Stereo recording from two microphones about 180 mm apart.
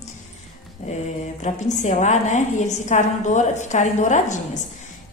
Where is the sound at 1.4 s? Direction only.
40° left (ahead or behind).